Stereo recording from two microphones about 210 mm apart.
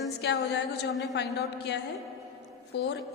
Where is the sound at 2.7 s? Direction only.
55° left (ahead or behind).